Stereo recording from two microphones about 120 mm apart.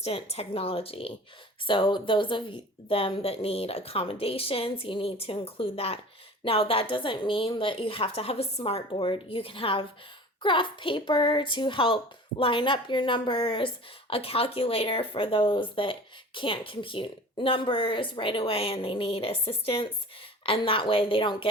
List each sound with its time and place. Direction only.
0.0 s speech: 60° left (ahead or behind)